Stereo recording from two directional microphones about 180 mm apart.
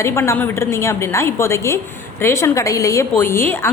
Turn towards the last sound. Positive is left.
turn(degrees=15)  # may be behind; listen again after turning